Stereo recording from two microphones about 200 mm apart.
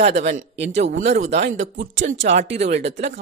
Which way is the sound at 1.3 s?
65° right (ahead or behind).